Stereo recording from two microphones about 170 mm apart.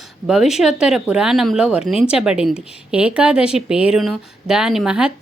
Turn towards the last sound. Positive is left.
turn(degrees=-5)  # may be behind; listen again after turning